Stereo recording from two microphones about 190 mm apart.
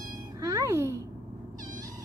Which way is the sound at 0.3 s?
15° right (ahead or behind).